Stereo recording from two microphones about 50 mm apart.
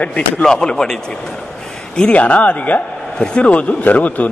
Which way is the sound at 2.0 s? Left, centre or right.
Left.